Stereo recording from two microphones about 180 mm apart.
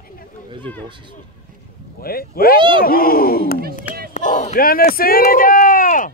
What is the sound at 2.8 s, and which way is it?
Speech, 55° left (ahead or behind).